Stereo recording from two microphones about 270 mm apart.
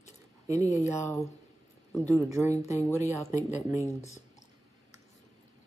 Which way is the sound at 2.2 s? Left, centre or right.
Centre.